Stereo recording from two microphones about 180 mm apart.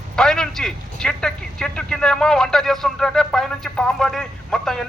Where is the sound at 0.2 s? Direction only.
5° left (ahead or behind).